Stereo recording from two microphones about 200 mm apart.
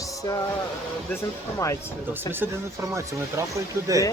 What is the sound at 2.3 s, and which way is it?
Speech, 10° right (ahead or behind).